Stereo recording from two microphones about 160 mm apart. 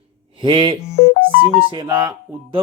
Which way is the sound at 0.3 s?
30° right (ahead or behind).